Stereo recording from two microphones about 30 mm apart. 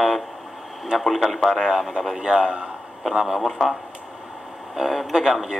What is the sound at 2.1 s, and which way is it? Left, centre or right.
Speech, right.